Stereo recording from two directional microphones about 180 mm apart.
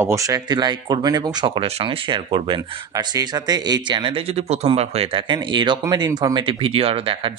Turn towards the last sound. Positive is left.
turn(degrees=-30)  # may be behind; listen again after turning